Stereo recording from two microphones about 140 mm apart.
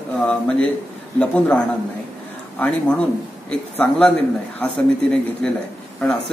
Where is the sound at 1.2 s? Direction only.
10° left (ahead or behind).